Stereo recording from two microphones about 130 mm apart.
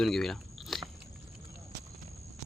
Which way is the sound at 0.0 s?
5° left (ahead or behind).